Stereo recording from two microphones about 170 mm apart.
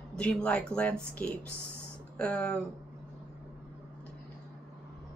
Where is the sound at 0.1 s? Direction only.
5° left (ahead or behind).